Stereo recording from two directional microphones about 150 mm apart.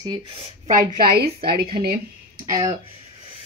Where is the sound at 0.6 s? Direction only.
80° right.